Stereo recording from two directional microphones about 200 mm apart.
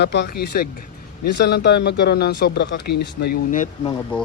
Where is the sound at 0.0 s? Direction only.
55° left (ahead or behind).